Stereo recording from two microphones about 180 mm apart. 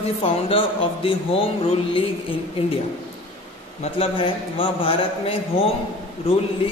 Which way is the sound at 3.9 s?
30° left (ahead or behind).